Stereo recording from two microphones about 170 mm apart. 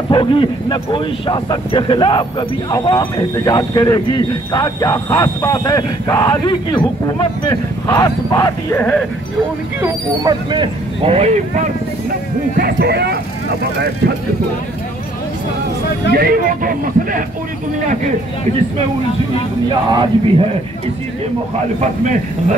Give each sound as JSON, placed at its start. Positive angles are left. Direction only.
{"t": 0.1, "sound": "speech", "side_deg": 30}
{"t": 8.7, "sound": "speech", "side_deg": 10}
{"t": 9.8, "sound": "speech", "side_deg": -20}
{"t": 12.5, "sound": "speech", "side_deg": -65}
{"t": 16.1, "sound": "speech", "side_deg": -60}
{"t": 19.9, "sound": "speech", "side_deg": -30}